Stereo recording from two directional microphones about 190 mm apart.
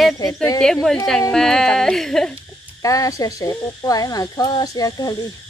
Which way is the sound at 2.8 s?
15° left (ahead or behind).